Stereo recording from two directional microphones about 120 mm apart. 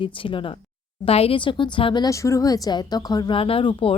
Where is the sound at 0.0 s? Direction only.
45° left (ahead or behind).